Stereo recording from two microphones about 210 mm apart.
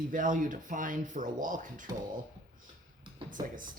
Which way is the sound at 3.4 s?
40° right (ahead or behind).